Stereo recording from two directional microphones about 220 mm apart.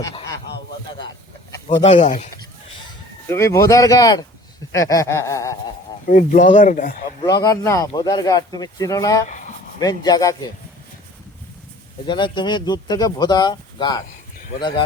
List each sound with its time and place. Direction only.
0.0 s a man's voice: 15° left (ahead or behind)
1.8 s speech: 30° left (ahead or behind)
3.2 s speech: 10° left (ahead or behind)
6.1 s speech: 35° left (ahead or behind)
7.2 s speech: 15° left (ahead or behind)
12.0 s speech: 20° left (ahead or behind)